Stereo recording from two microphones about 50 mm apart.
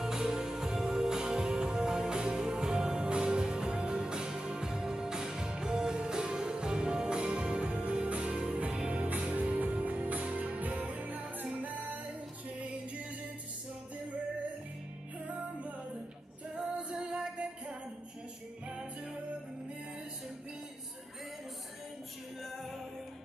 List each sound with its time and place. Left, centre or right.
0.0 s music: centre; by 11.4 s right
16.5 s music: centre